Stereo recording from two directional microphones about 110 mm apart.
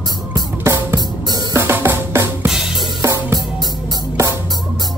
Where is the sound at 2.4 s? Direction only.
5° right (ahead or behind).